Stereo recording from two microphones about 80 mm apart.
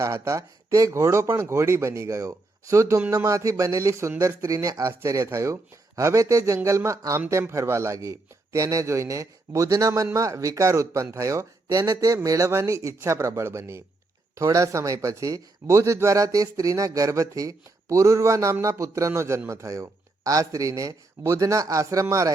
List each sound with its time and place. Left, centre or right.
0.0 s a man's voice: right